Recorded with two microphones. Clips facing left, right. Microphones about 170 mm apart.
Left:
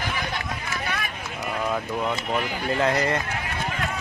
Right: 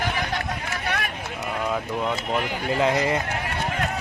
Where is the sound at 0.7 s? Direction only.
65° right (ahead or behind).